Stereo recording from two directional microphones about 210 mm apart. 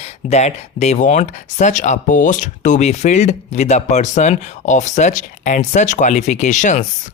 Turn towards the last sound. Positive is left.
turn(degrees=35)  # may be behind; listen again after turning